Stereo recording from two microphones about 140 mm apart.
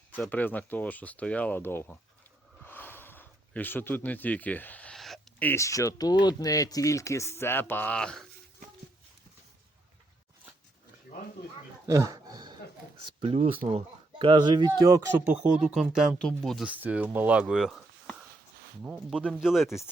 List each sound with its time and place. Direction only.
0.3 s speech: 10° left (ahead or behind)
2.6 s a sound: 15° left (ahead or behind)
5.4 s speech: 15° left (ahead or behind)
11.9 s a sound: 25° right (ahead or behind)
13.0 s speech: 40° right (ahead or behind); by 15.4 s 15° right (ahead or behind)
15.7 s speech: centre (ahead or behind)
16.6 s speech: 10° right (ahead or behind)